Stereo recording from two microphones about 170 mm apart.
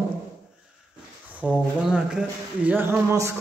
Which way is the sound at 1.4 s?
5° right (ahead or behind).